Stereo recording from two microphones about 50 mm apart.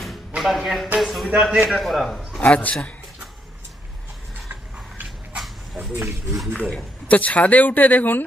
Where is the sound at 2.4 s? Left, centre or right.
Left.